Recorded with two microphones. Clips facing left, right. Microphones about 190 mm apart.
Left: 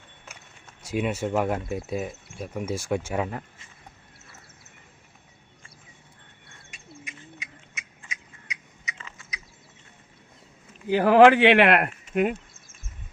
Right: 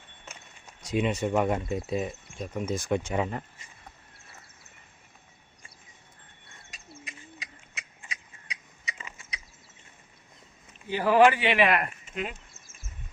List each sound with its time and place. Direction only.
0.8 s speech: 5° left (ahead or behind)
7.0 s a sound: 35° right (ahead or behind)
9.0 s mechanisms: 15° right (ahead or behind)
11.0 s speech: 65° left (ahead or behind)